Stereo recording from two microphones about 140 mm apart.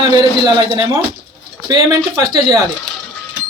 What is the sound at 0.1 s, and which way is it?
A man's voice, 30° right (ahead or behind).